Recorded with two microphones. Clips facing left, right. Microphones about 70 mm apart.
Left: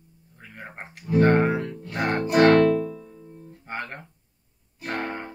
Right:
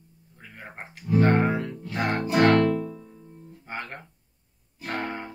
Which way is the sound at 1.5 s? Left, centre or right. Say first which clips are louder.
Left 2 dB; centre.